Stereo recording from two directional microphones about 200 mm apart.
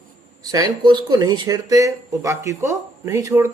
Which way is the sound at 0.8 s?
20° right (ahead or behind).